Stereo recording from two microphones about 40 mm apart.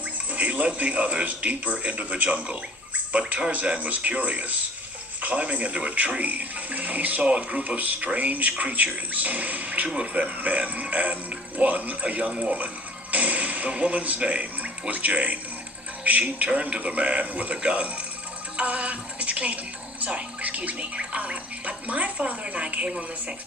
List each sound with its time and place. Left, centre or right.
0.3 s a man's voice: right
7.3 s speech: right
7.8 s a man's voice: right
18.5 s music: right
20.0 s speech: right